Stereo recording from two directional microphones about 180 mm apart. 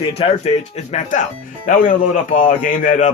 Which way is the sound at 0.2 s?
35° left (ahead or behind).